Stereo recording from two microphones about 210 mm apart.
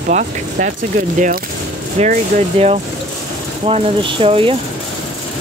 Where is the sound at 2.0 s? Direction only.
30° right (ahead or behind).